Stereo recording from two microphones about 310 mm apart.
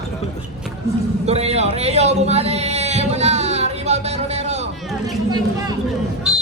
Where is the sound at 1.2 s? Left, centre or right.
Centre.